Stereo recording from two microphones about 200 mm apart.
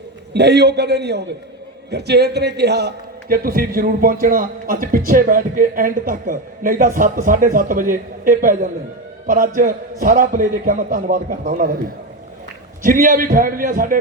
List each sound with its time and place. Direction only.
0.3 s a man's voice: 55° right (ahead or behind)
12.8 s a man's voice: 45° right (ahead or behind)